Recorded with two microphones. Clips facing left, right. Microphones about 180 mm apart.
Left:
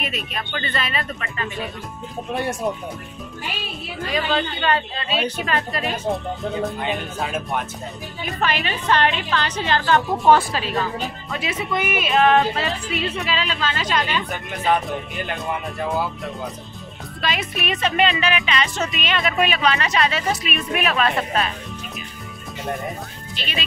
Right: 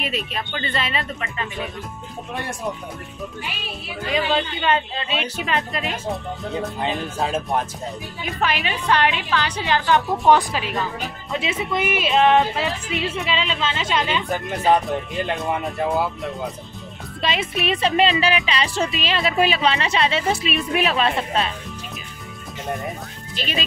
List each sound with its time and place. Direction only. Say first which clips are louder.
0.0 s speech: right 2 dB; 30° right (ahead or behind)
4.1 s speech: right 1 dB; 20° right (ahead or behind)
6.8 s speech: right 2 dB; 30° right (ahead or behind)
8.4 s a woman's voice: even; 15° right (ahead or behind)
15.5 s speech: right 2 dB; 20° right (ahead or behind)
17.2 s speech: right 2 dB; 25° right (ahead or behind)
23.3 s speech: right 4 dB; 40° right (ahead or behind)